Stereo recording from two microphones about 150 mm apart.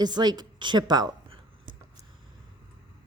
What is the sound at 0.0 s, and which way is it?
A woman's voice, 30° right (ahead or behind).